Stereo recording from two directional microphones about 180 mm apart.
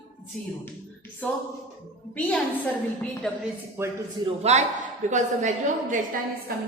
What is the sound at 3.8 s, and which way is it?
Speech, 15° right (ahead or behind).